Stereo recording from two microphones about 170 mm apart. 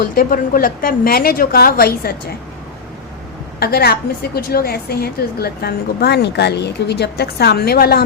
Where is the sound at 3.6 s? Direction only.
65° left (ahead or behind).